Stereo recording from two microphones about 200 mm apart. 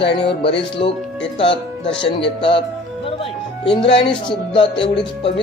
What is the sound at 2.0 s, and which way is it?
Music, 25° left (ahead or behind).